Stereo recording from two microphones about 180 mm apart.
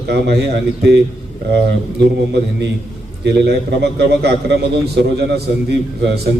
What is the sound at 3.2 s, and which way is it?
A man's voice, 65° right (ahead or behind).